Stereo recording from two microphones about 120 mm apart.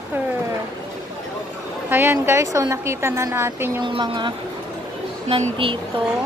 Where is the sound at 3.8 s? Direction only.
45° right (ahead or behind).